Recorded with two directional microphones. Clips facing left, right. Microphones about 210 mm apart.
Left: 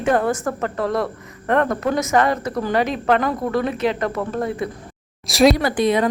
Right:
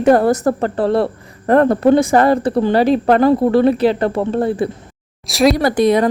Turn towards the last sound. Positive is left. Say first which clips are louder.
# right 5 dB
turn(degrees=-40)  # may be behind; listen again after turning